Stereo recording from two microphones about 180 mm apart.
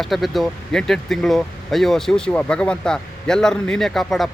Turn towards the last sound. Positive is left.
turn(degrees=0)  # may be behind; listen again after turning